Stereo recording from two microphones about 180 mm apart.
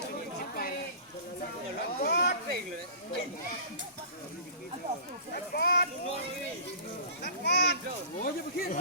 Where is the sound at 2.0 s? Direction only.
65° left (ahead or behind).